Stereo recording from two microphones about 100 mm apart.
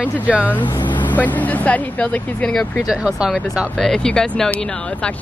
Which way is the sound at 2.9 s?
10° right (ahead or behind).